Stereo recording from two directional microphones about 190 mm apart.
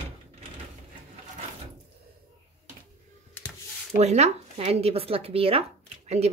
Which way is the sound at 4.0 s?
35° right (ahead or behind).